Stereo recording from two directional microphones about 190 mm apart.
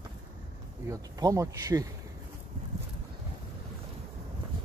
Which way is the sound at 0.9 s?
20° right (ahead or behind).